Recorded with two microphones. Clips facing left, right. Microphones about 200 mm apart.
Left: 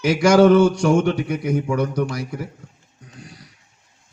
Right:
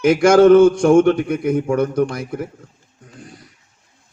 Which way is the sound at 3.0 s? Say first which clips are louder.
Right 2 dB; 50° right (ahead or behind).